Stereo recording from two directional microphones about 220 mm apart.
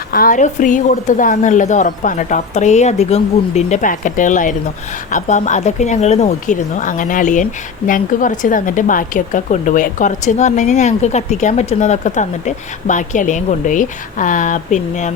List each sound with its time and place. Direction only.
0.1 s a woman's voice: 40° left (ahead or behind)